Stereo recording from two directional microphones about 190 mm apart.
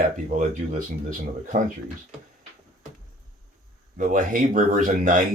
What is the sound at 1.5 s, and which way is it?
Speech, 45° right (ahead or behind).